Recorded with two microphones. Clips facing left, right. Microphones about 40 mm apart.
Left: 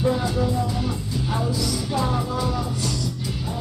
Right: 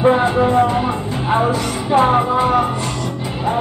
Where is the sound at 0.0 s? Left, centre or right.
Right.